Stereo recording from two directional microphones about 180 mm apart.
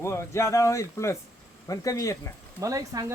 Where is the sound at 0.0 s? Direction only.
15° left (ahead or behind).